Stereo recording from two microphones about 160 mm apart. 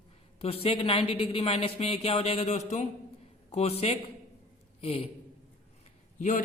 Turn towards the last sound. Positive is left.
turn(degrees=50)  # may be behind; listen again after turning